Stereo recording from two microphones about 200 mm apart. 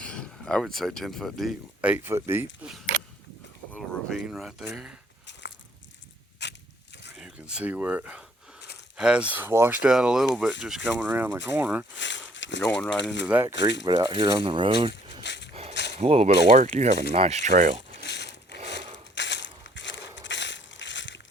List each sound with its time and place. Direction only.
0.0 s speech: 5° left (ahead or behind)
6.4 s a sound: 60° left (ahead or behind)
7.2 s speech: 5° right (ahead or behind)
11.9 s a sound: 65° left (ahead or behind)
13.0 s speech: 65° left (ahead or behind)
13.2 s speech: 10° right (ahead or behind)
13.5 s speech: 65° left (ahead or behind)
13.8 s speech: 25° right (ahead or behind)
15.2 s dog: 60° left (ahead or behind)
15.7 s a sound: 60° left (ahead or behind)
16.0 s speech: 30° right (ahead or behind)
18.0 s a sound: 60° left (ahead or behind)
19.1 s crushing: 60° left (ahead or behind)